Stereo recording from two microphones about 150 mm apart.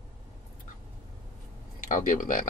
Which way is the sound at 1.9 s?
60° left (ahead or behind).